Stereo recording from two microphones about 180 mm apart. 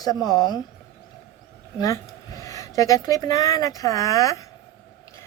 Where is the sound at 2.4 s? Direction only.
20° left (ahead or behind).